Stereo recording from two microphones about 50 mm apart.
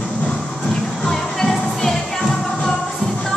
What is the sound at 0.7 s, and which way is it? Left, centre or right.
Music, centre.